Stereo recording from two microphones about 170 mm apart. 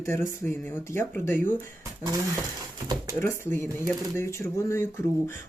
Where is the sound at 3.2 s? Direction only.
15° left (ahead or behind).